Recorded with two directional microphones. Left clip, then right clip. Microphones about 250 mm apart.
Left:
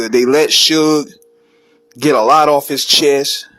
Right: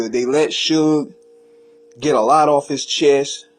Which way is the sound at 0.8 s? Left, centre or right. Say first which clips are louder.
Left 4 dB; left.